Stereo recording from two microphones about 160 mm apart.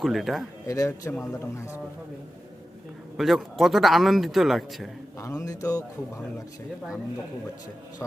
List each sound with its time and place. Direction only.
0.0 s a man's voice: centre (ahead or behind)
0.7 s speech: 20° left (ahead or behind)
3.2 s a man's voice: centre (ahead or behind)
5.2 s speech: 20° left (ahead or behind)